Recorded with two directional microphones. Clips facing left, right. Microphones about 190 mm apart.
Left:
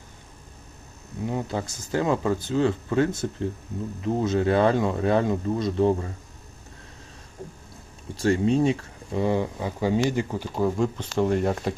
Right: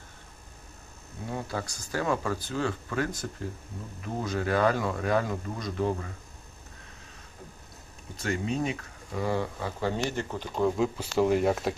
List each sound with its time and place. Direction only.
1.3 s speech: 20° left (ahead or behind)
8.2 s speech: 30° left (ahead or behind); by 11.7 s 5° right (ahead or behind)